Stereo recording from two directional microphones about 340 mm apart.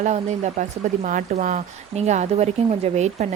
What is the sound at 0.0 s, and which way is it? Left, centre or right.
Speech, centre.